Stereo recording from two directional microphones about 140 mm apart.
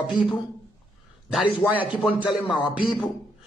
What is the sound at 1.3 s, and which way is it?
Speech, 5° right (ahead or behind).